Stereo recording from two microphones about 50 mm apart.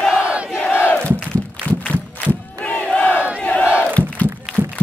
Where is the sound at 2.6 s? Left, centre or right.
Left.